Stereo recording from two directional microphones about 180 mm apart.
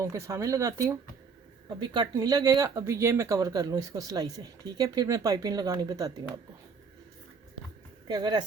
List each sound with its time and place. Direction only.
0.0 s speech: 15° right (ahead or behind)
8.0 s speech: 25° right (ahead or behind)